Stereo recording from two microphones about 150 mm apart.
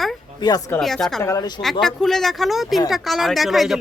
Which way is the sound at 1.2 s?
25° left (ahead or behind).